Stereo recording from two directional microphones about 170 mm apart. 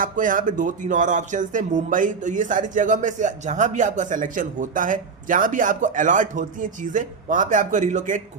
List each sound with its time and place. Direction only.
0.0 s speech: 50° right (ahead or behind)